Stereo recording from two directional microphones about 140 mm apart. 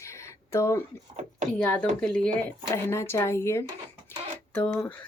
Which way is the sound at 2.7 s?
15° left (ahead or behind).